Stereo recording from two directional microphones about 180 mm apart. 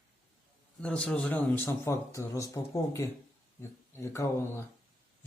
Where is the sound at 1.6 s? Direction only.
15° left (ahead or behind).